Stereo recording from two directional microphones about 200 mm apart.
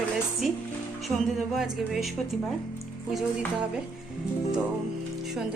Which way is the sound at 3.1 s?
Centre (ahead or behind).